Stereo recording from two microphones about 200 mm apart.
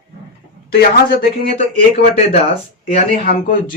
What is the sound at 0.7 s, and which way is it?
Speech, 45° left (ahead or behind).